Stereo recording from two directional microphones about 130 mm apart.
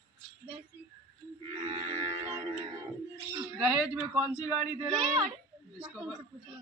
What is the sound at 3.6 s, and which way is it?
A man's voice, 5° right (ahead or behind).